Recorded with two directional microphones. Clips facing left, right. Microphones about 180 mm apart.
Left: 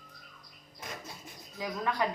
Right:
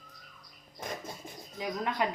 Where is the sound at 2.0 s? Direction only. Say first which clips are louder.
Right 1 dB; 20° right (ahead or behind).